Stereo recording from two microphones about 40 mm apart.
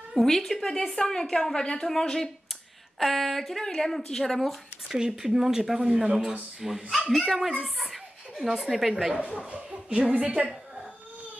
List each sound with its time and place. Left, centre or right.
0.2 s speech: centre
4.8 s speech: centre
7.8 s a sound: centre
9.1 s speech: right